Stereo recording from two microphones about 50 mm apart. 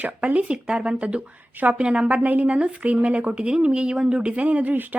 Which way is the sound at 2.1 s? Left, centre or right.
Right.